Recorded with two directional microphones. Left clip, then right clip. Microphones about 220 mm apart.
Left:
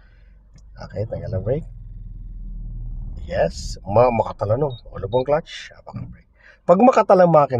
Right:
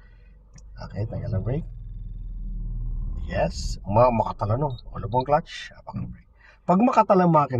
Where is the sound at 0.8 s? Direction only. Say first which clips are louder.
Left 7 dB; 35° left (ahead or behind).